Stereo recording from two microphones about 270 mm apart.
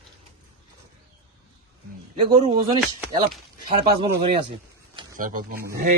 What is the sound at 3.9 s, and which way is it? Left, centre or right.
Speech, right.